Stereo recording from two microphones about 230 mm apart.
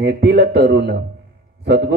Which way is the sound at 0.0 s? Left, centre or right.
Right.